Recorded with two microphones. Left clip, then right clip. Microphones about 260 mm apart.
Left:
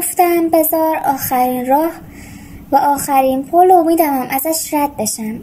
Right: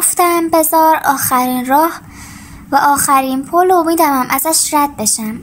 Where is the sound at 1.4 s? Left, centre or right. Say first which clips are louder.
Left 2 dB; right.